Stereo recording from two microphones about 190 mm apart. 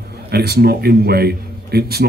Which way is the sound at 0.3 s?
55° right (ahead or behind).